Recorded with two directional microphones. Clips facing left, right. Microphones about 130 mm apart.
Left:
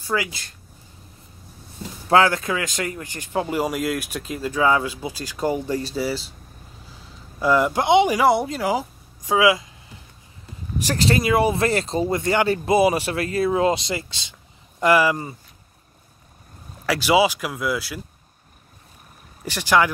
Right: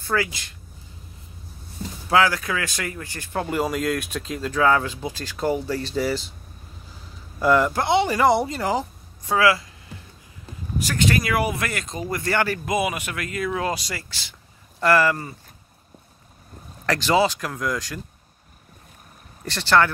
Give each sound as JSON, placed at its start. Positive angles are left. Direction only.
{"t": 0.0, "sound": "speech", "side_deg": 15}
{"t": 2.0, "sound": "speech", "side_deg": 25}
{"t": 7.3, "sound": "speech", "side_deg": 10}
{"t": 8.2, "sound": "speech", "side_deg": 0}
{"t": 10.8, "sound": "speech", "side_deg": 35}
{"t": 16.8, "sound": "speech", "side_deg": 10}
{"t": 19.4, "sound": "speech", "side_deg": 10}